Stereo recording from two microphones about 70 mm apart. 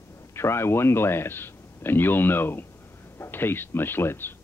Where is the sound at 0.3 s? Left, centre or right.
Left.